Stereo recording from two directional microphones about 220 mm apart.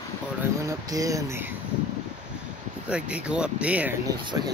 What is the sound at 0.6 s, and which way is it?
Speech, 15° right (ahead or behind).